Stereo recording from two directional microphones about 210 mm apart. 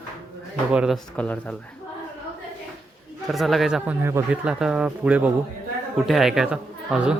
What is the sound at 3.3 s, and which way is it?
Speech, centre (ahead or behind).